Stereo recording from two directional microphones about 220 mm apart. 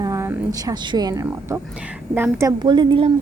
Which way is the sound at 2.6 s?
20° right (ahead or behind).